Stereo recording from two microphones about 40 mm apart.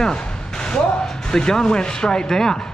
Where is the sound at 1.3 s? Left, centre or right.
Centre.